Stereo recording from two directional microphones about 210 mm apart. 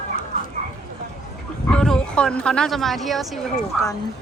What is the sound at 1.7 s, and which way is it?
Speech, 5° left (ahead or behind).